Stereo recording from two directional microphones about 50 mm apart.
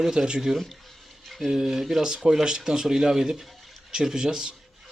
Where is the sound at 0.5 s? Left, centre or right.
Centre.